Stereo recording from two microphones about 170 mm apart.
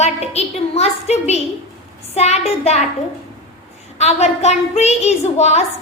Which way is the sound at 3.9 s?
40° left (ahead or behind).